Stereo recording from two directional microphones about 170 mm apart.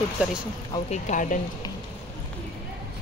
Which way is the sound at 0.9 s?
50° left (ahead or behind).